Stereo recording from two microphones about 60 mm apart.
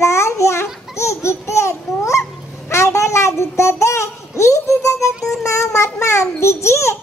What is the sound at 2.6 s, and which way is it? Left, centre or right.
Child singing, left.